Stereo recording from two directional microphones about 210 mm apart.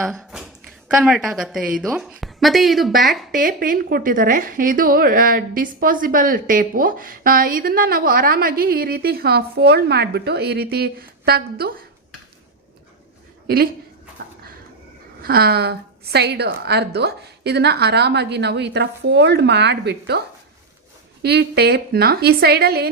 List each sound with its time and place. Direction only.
0.0 s a sound: centre (ahead or behind)
0.9 s a woman's voice: centre (ahead or behind)
3.3 s a woman's voice: 40° right (ahead or behind)
15.2 s a woman's voice: 45° right (ahead or behind)